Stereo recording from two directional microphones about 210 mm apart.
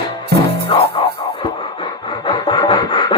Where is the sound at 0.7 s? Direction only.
25° left (ahead or behind).